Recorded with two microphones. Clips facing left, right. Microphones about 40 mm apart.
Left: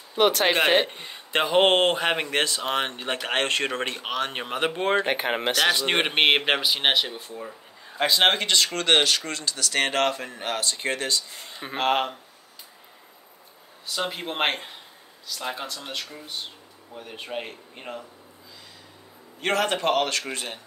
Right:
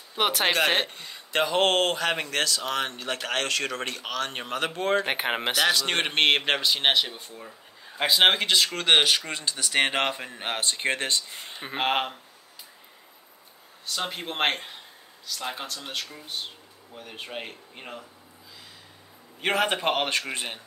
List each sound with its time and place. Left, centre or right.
0.1 s speech: centre
0.5 s speech: centre
0.9 s speech: left
5.0 s a man's voice: centre
5.7 s a man's voice: centre
10.5 s speech: right
11.6 s speech: centre
13.8 s a man's voice: centre
19.4 s speech: centre